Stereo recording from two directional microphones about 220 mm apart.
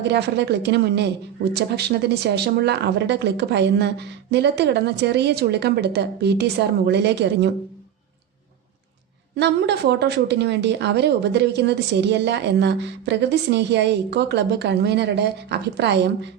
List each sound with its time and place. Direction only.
0.1 s speech: 50° right (ahead or behind)
9.3 s speech: 50° right (ahead or behind)